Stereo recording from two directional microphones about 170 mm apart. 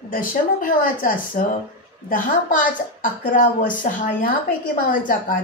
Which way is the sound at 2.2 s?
55° left (ahead or behind).